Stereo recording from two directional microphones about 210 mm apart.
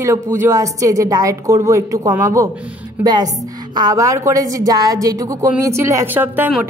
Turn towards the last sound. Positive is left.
turn(degrees=-10)  # may be behind; listen again after turning